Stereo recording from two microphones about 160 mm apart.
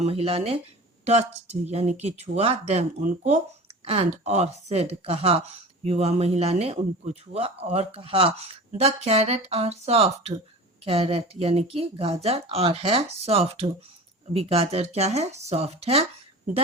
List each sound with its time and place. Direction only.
0.0 s speech: 40° right (ahead or behind)
1.6 s speech: 45° right (ahead or behind)